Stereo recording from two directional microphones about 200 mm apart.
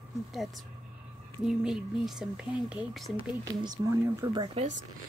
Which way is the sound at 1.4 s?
5° right (ahead or behind).